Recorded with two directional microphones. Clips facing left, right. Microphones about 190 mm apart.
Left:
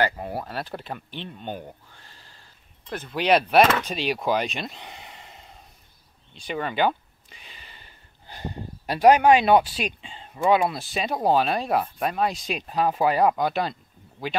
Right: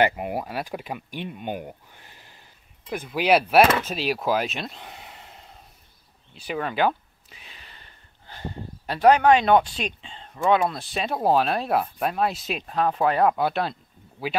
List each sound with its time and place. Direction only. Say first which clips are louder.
0.0 s speech: right 3 dB; 15° right (ahead or behind); by 5.6 s centre (ahead or behind)
6.3 s a sound: even; 5° right (ahead or behind)
8.3 s speech: left 1 dB; 15° left (ahead or behind)